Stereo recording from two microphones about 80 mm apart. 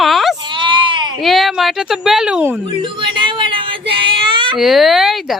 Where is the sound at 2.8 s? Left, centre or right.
Right.